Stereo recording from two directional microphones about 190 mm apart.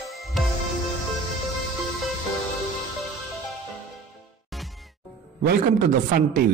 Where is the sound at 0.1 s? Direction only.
Centre (ahead or behind).